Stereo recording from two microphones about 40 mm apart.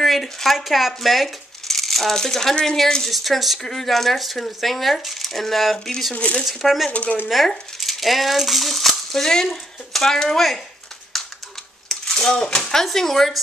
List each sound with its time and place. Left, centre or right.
0.0 s speech: centre
6.1 s speech: left
6.4 s speech: centre
6.9 s speech: left
7.4 s speech: centre
11.1 s typing: centre
11.9 s speech: centre